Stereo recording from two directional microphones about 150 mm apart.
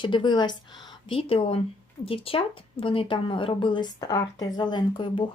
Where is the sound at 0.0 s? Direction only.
30° left (ahead or behind).